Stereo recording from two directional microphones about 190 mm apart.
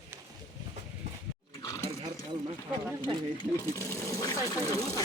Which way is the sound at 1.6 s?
15° left (ahead or behind).